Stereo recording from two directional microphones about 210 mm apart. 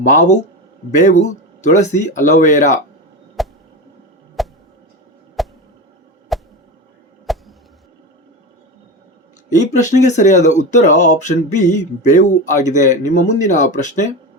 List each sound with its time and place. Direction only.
0.0 s speech: 35° left (ahead or behind)
3.4 s a sound: centre (ahead or behind)
9.5 s speech: 35° left (ahead or behind)